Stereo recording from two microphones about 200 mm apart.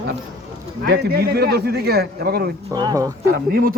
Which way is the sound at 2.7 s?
20° right (ahead or behind).